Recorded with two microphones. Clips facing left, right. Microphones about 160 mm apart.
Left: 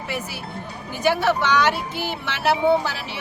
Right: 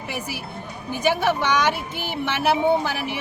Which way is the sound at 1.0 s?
15° right (ahead or behind).